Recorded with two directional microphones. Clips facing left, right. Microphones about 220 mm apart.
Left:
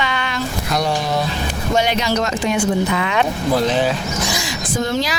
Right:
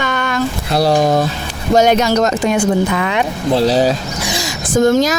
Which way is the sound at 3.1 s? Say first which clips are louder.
Right 2 dB; 30° right (ahead or behind).